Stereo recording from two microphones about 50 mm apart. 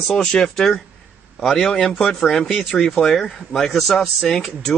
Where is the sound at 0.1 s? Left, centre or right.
Centre.